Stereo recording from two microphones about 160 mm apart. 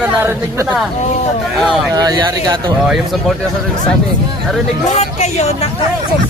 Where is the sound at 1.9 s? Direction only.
25° right (ahead or behind).